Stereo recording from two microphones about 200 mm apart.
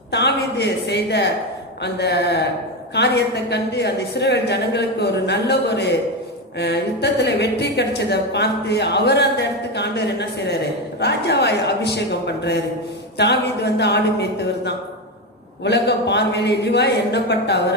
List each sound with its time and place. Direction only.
0.1 s a woman's voice: 55° left (ahead or behind)